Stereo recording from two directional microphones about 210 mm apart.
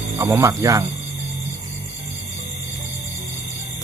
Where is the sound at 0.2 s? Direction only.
15° right (ahead or behind).